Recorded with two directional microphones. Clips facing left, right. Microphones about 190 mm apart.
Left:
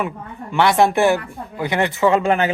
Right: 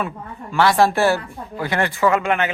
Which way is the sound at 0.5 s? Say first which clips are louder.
Left 1 dB; 20° left (ahead or behind).